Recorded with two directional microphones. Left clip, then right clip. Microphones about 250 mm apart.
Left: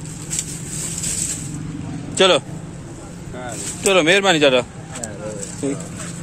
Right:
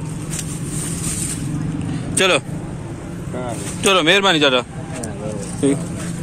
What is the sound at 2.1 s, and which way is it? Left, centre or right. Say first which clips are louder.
Speech: left 2 dB; centre.